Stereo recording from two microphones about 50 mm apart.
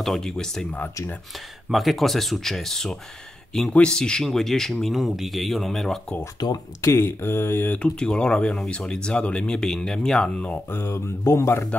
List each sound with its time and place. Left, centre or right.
0.0 s speech: centre
1.7 s speech: centre
4.2 s speech: centre
6.8 s speech: left
7.8 s speech: centre
9.6 s speech: centre
10.7 s a sound: left